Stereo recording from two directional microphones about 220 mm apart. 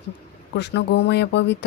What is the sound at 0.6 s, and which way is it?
Speech, 50° left (ahead or behind).